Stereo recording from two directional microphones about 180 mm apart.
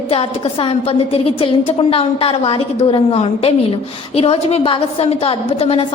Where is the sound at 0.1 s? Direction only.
30° left (ahead or behind).